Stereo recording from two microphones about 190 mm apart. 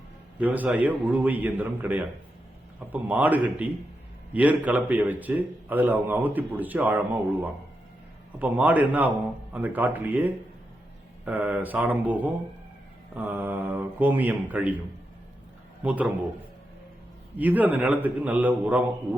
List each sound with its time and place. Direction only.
0.3 s a man's voice: 10° right (ahead or behind)
15.8 s a man's voice: 10° right (ahead or behind)
17.3 s a man's voice: 10° right (ahead or behind)